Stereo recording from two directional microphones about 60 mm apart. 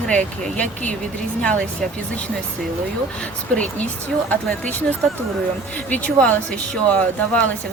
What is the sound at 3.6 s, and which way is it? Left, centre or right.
Speech, left.